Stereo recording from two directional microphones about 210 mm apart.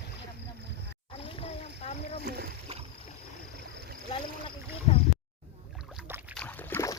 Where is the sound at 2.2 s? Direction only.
50° right (ahead or behind).